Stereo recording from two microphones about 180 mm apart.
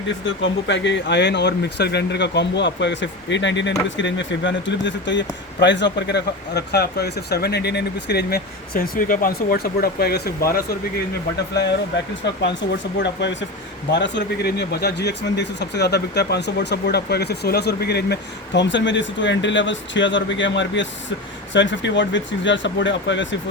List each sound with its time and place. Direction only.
0.4 s speech: 85° left; by 10.8 s 55° left (ahead or behind)
12.2 s speech: 75° left (ahead or behind)